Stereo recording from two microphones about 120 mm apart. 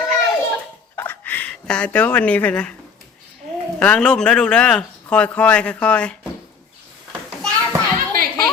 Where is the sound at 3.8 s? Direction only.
10° left (ahead or behind).